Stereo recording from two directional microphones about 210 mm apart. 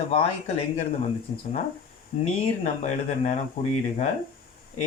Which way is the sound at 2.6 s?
30° left (ahead or behind).